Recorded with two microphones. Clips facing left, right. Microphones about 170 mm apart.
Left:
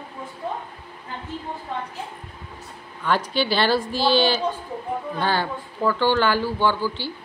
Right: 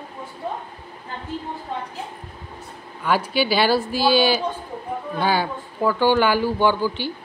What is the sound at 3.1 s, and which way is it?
Speech, 10° right (ahead or behind).